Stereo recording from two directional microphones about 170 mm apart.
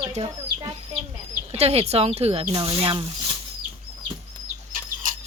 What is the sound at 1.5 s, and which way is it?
Speech, 40° right (ahead or behind).